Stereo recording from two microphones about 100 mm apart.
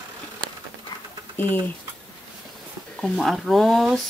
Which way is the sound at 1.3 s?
20° left (ahead or behind).